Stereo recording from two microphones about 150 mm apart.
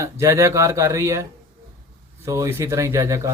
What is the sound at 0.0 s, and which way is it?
A man's voice, 20° right (ahead or behind).